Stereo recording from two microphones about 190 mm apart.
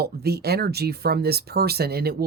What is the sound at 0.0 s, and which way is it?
A man's voice, 55° right (ahead or behind).